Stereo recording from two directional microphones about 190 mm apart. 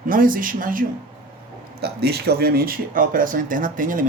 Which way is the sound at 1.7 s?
55° right (ahead or behind).